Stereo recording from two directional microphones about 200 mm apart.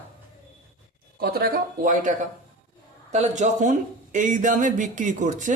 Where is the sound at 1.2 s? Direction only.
50° right (ahead or behind).